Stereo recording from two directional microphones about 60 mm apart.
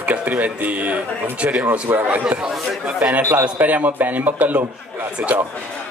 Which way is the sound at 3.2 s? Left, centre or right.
Right.